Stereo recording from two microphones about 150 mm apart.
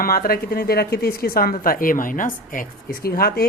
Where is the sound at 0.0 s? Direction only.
80° left.